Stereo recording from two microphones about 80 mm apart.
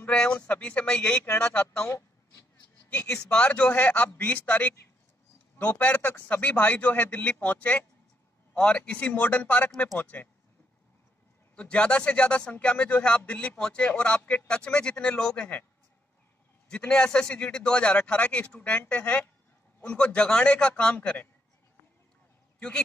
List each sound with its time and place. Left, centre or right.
0.0 s a sound: centre
0.5 s speech: centre
3.1 s a man's voice: centre
11.5 s speech: centre
16.6 s speech: centre